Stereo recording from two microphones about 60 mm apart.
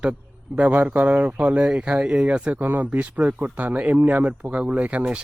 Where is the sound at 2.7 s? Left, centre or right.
Right.